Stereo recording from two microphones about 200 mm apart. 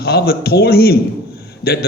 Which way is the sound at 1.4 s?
50° left (ahead or behind).